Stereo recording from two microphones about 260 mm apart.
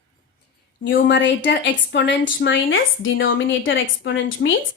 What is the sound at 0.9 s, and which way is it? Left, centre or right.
A woman's voice, left.